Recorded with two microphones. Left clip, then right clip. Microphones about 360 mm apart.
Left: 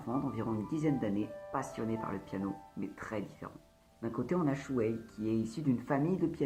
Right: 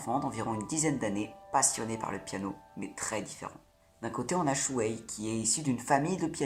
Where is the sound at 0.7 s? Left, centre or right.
Right.